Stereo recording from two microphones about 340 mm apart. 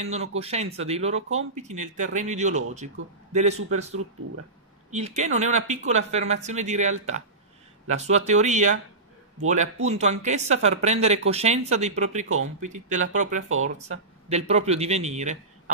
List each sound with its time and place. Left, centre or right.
0.0 s speech: centre
3.0 s a man's voice: right
3.3 s speech: centre